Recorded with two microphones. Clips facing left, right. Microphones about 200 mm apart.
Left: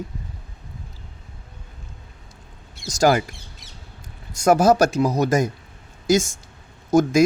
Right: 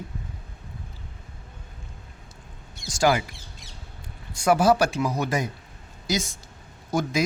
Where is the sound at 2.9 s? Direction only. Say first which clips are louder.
Left 4 dB; 45° left (ahead or behind).